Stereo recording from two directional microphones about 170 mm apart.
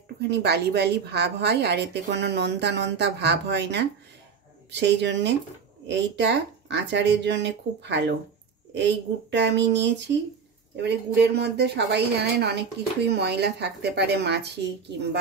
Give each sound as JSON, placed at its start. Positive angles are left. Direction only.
{"t": 0.3, "sound": "a woman's voice", "side_deg": -75}